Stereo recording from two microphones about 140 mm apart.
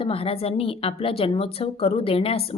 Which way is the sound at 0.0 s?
40° left (ahead or behind).